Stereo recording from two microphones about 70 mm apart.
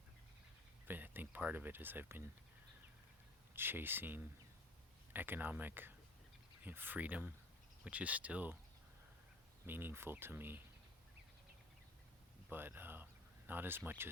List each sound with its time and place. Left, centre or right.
0.9 s speech: right
3.5 s speech: right
9.6 s speech: right
12.5 s speech: right